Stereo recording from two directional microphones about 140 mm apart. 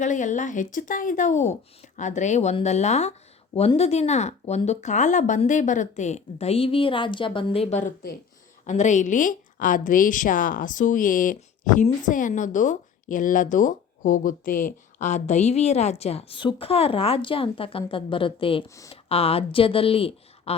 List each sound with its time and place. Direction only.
0.0 s speech: 60° left (ahead or behind); by 7.8 s 45° left (ahead or behind)
7.8 s a woman's voice: 65° left (ahead or behind); by 20.6 s 45° left (ahead or behind)